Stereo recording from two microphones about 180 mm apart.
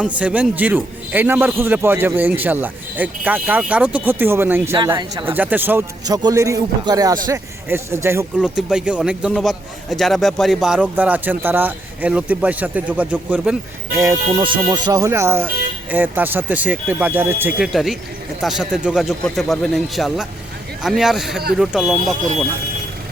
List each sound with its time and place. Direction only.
0.0 s a man's voice: 5° right (ahead or behind)
5.3 s a man's voice: 10° right (ahead or behind)
8.4 s a man's voice: 5° right (ahead or behind)
13.9 s a man's voice: 15° right (ahead or behind)
17.7 s speech: centre (ahead or behind)